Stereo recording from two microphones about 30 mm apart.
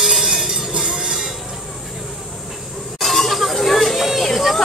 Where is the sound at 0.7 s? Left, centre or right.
Right.